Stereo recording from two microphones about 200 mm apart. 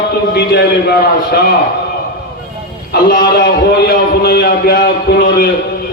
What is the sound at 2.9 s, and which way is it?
A man's voice, 50° left (ahead or behind).